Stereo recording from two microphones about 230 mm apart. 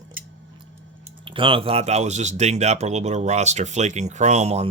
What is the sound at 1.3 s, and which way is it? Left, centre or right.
Speech, right.